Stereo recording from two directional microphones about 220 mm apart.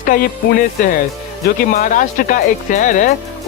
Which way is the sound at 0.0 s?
40° left (ahead or behind).